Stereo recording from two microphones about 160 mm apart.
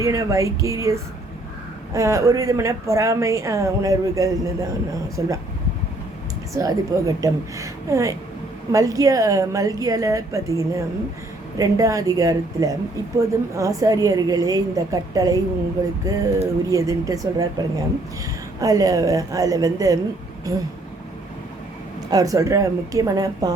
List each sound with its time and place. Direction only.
0.0 s a woman's voice: 20° right (ahead or behind)
6.5 s a woman's voice: 20° right (ahead or behind)
22.1 s a woman's voice: 20° right (ahead or behind)